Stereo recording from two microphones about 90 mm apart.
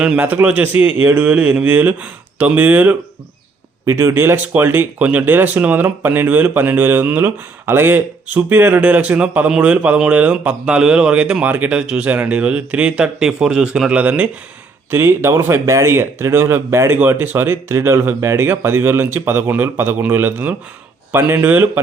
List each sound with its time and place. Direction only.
0.0 s speech: 15° right (ahead or behind)
3.8 s speech: 30° right (ahead or behind); by 14.3 s 15° right (ahead or behind)
14.8 s speech: 25° right (ahead or behind)